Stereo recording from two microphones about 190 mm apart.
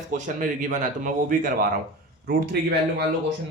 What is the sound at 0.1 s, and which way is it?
Speech, 45° right (ahead or behind).